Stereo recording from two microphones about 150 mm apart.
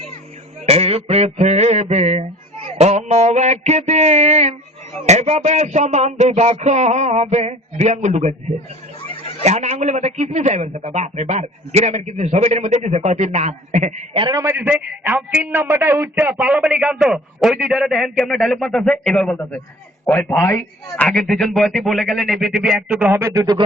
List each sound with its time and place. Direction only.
0.6 s a man's voice: 45° right (ahead or behind)
9.4 s a man's voice: 50° right (ahead or behind)
14.1 s a man's voice: 30° right (ahead or behind)